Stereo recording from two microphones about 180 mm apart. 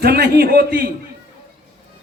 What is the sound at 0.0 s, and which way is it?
Speech, 60° right (ahead or behind).